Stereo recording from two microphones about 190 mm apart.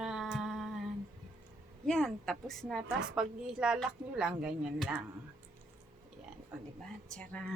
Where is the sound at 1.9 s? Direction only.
5° left (ahead or behind).